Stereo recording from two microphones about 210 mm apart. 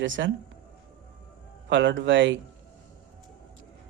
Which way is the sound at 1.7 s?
60° right (ahead or behind).